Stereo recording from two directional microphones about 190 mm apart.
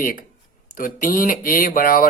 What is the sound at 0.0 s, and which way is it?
Speech, 45° left (ahead or behind).